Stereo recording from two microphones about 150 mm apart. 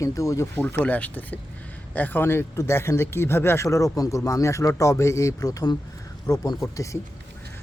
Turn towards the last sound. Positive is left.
turn(degrees=20)  # may be behind; listen again after turning